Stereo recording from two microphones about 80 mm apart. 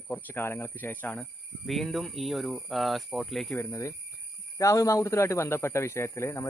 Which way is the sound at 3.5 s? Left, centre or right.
Left.